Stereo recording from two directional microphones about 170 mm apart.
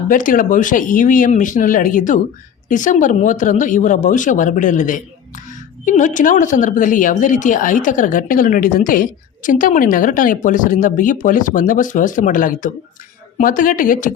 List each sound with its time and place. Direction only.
0.1 s speech: 50° left (ahead or behind)